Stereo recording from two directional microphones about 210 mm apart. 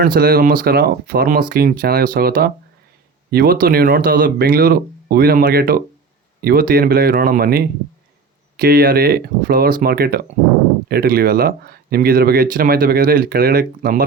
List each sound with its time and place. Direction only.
0.0 s speech: 45° right (ahead or behind)